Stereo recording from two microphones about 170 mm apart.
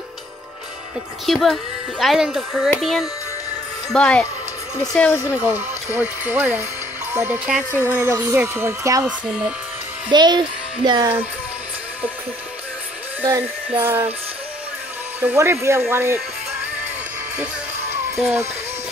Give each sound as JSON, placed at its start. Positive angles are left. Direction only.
{"t": 1.2, "sound": "speech", "side_deg": 0}
{"t": 5.3, "sound": "speech", "side_deg": -10}
{"t": 10.1, "sound": "a child's voice", "side_deg": -25}
{"t": 13.2, "sound": "speech", "side_deg": -15}
{"t": 15.1, "sound": "speech", "side_deg": -10}
{"t": 18.2, "sound": "speech", "side_deg": -15}